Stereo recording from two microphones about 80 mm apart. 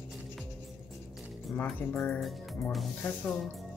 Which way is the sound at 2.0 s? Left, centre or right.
Centre.